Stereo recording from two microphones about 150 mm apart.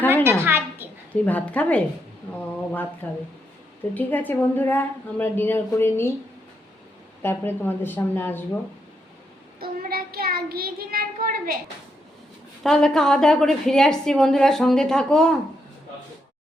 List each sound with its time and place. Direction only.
0.1 s a sound: 15° right (ahead or behind)
1.1 s a woman's voice: 10° left (ahead or behind)
3.9 s a woman's voice: 10° left (ahead or behind)
7.2 s a woman's voice: 15° left (ahead or behind)
9.6 s a child's voice: 90° right; by 11.6 s 70° right (ahead or behind)
12.6 s a woman's voice: 5° left (ahead or behind)